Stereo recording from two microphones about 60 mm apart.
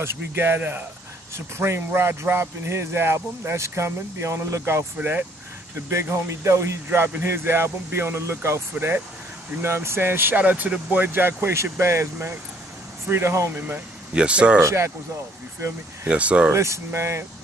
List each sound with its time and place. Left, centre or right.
0.0 s speech: right
1.3 s speech: right
5.9 s speech: right
9.6 s speech: right
14.1 s speech: centre
14.6 s speech: right
16.1 s speech: right
16.5 s speech: right